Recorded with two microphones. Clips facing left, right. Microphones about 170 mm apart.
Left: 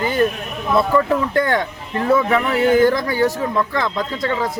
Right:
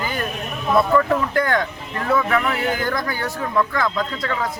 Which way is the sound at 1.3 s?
25° left (ahead or behind).